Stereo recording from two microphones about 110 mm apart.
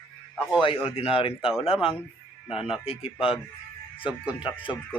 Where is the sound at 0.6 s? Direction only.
55° left (ahead or behind).